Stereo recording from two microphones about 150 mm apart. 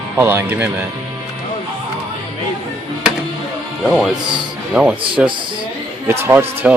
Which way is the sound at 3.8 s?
Centre (ahead or behind).